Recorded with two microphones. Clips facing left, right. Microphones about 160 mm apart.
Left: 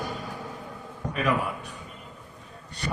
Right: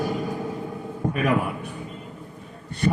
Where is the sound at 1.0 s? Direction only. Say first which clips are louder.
Right 7 dB; 50° right (ahead or behind).